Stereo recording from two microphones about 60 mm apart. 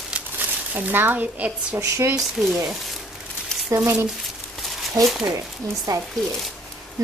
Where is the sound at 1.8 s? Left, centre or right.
Right.